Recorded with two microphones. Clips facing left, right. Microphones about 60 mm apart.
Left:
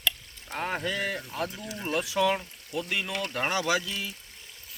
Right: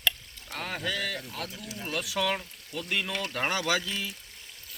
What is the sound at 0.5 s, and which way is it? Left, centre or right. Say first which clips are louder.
Boat: left 3 dB; centre.